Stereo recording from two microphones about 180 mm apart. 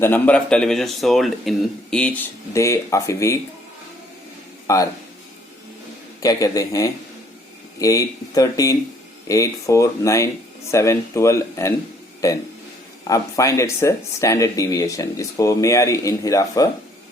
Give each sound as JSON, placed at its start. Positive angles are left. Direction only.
{"t": 0.0, "sound": "speech", "side_deg": 10}
{"t": 4.6, "sound": "speech", "side_deg": 20}
{"t": 6.2, "sound": "speech", "side_deg": 20}
{"t": 13.1, "sound": "speech", "side_deg": 20}